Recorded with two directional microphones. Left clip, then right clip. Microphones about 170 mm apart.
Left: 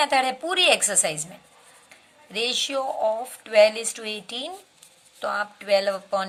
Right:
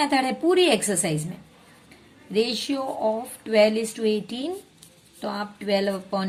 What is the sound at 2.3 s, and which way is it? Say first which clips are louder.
Speech: even; 35° left (ahead or behind).